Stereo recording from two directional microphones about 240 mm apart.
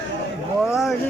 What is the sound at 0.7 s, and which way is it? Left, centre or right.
Speech, centre.